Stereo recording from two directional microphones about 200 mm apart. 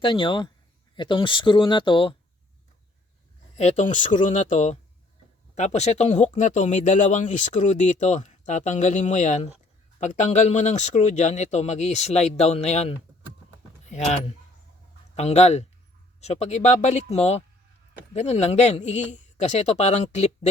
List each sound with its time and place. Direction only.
0.0 s speech: 25° left (ahead or behind)
3.6 s speech: 35° left (ahead or behind)